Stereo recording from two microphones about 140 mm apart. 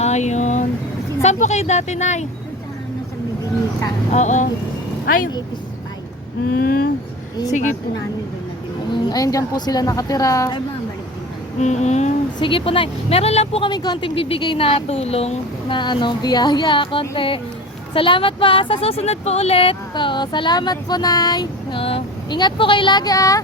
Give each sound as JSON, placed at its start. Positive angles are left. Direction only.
{"t": 0.0, "sound": "a sound", "side_deg": 55}
{"t": 1.2, "sound": "a woman's voice", "side_deg": 55}
{"t": 4.1, "sound": "a woman's voice", "side_deg": 55}
{"t": 5.0, "sound": "speech", "side_deg": 80}
{"t": 6.6, "sound": "speech", "side_deg": 90}
{"t": 7.5, "sound": "a woman's voice", "side_deg": 60}
{"t": 8.9, "sound": "a woman's voice", "side_deg": 30}
{"t": 11.6, "sound": "a woman's voice", "side_deg": 55}
{"t": 12.4, "sound": "speech", "side_deg": 40}
{"t": 15.8, "sound": "speech", "side_deg": 35}